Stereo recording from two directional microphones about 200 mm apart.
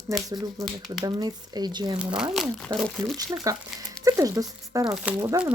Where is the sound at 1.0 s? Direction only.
20° right (ahead or behind).